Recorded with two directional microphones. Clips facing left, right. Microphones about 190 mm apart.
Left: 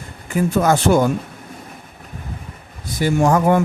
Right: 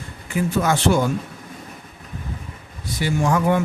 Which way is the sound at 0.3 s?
45° left (ahead or behind).